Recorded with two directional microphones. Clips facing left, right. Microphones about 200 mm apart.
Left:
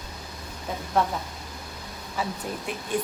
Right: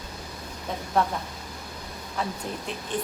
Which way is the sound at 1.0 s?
Centre (ahead or behind).